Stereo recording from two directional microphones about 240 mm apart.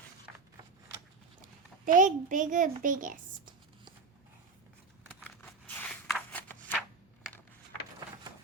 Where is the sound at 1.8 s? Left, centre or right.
Right.